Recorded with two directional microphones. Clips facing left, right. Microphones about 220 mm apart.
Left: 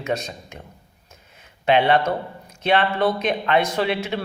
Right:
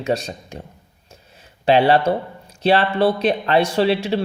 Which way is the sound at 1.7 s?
35° right (ahead or behind).